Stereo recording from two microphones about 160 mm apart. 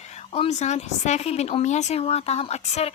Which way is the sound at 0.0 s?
45° left (ahead or behind).